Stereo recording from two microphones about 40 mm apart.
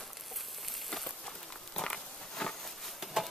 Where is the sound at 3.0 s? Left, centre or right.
Centre.